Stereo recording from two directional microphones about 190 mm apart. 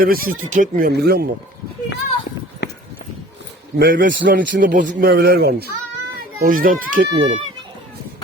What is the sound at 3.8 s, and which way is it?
Speech, 50° right (ahead or behind).